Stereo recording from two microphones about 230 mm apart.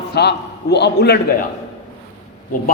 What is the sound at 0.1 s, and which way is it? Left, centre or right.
A man's voice, left.